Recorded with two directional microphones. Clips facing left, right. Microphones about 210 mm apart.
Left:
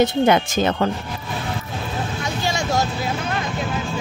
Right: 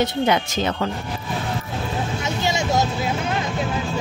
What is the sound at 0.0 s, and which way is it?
Speech, 50° left (ahead or behind).